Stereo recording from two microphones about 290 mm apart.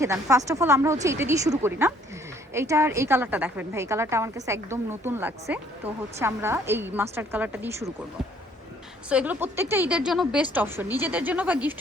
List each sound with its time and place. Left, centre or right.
0.0 s a woman's voice: centre
9.0 s a woman's voice: centre